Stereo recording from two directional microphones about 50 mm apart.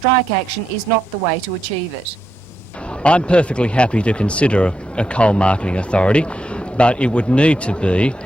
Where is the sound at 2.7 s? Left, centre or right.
Left.